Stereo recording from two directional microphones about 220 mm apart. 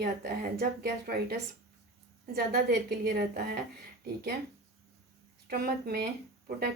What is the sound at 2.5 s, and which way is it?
Speech, 45° right (ahead or behind).